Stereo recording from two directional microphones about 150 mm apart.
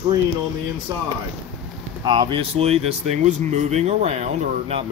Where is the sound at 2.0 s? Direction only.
30° right (ahead or behind).